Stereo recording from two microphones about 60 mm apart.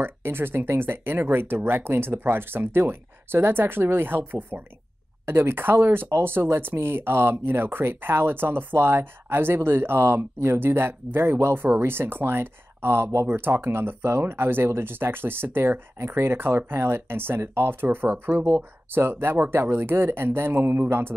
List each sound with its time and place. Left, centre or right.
0.0 s speech: right
13.3 s speech: right